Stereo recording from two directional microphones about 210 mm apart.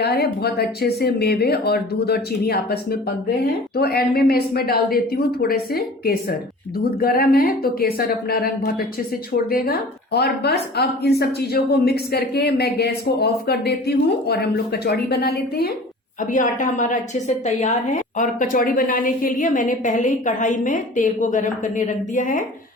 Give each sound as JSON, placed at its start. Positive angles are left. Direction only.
{"t": 0.0, "sound": "a woman's voice", "side_deg": 50}
{"t": 16.3, "sound": "a woman's voice", "side_deg": 35}